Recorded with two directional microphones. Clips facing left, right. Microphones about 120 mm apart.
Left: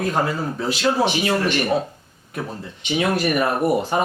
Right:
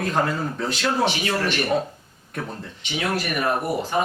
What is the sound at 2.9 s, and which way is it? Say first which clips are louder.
Speech: left 5 dB; 25° left (ahead or behind).